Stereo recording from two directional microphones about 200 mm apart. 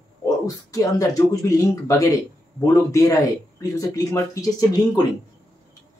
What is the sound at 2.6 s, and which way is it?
Speech, 15° left (ahead or behind).